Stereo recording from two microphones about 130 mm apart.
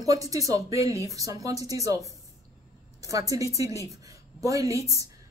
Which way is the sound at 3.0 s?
25° right (ahead or behind).